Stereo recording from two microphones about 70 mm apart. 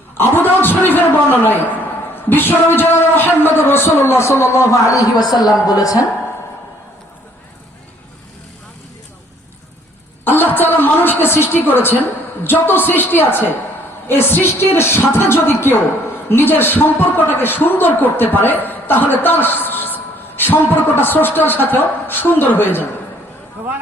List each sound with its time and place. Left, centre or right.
0.2 s a man's voice: left
10.2 s a woman's voice: left